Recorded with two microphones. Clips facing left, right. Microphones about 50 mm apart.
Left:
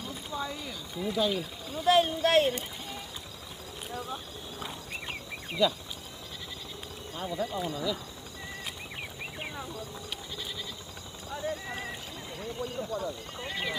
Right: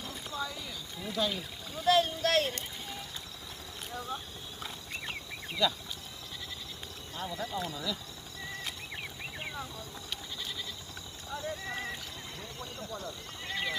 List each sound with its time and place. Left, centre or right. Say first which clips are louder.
0.3 s a sound: left 2 dB; centre
1.0 s speech: left 4 dB; centre
1.9 s speech: left 3 dB; centre
2.5 s a sound: left 5 dB; centre
5.6 s speech: left 4 dB; centre
7.2 s speech: left 3 dB; centre
11.4 s speech: left 3 dB; centre